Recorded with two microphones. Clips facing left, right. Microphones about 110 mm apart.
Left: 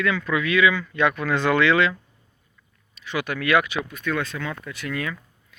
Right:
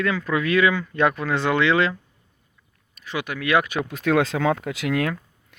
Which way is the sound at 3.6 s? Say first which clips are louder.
Right 2 dB; 45° right (ahead or behind).